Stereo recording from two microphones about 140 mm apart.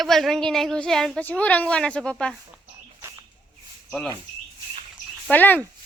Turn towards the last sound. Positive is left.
turn(degrees=15)  # may be behind; listen again after turning